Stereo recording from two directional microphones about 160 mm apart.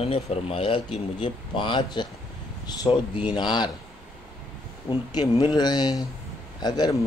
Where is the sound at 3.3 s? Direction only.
25° left (ahead or behind).